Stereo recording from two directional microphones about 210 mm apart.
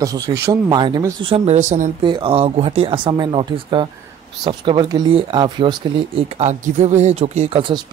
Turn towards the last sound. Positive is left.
turn(degrees=-25)  # may be behind; listen again after turning